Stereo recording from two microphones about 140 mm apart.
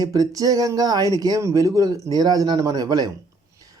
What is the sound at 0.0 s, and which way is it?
Speech, 25° right (ahead or behind).